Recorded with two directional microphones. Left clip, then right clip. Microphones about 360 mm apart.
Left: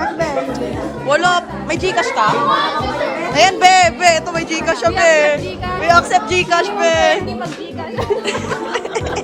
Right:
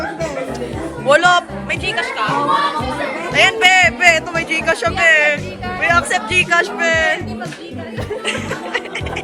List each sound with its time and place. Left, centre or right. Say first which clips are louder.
1.0 s speech: right 3 dB; centre
1.8 s speech: left 5 dB; centre
3.3 s speech: left 1 dB; centre